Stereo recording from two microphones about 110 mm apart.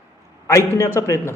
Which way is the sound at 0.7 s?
30° left (ahead or behind).